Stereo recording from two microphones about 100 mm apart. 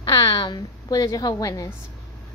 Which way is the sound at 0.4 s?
50° left (ahead or behind).